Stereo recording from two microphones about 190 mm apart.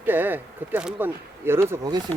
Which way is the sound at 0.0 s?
10° right (ahead or behind).